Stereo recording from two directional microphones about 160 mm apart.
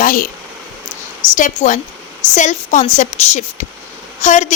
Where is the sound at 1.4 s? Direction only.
50° left (ahead or behind).